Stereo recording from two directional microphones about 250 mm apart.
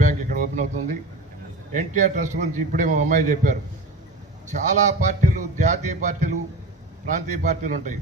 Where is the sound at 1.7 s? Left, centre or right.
Right.